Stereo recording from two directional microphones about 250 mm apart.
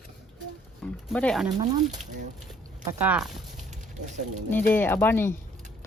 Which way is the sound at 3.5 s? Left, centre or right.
Right.